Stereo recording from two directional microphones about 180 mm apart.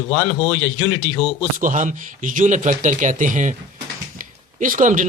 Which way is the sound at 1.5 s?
45° right (ahead or behind).